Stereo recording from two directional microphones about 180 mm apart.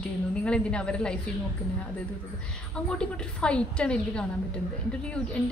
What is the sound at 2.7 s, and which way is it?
A woman's voice, 5° left (ahead or behind).